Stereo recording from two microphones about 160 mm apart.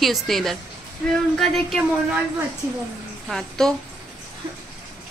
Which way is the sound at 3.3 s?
5° left (ahead or behind).